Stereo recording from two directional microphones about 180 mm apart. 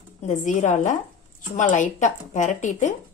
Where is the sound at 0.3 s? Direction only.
45° left (ahead or behind).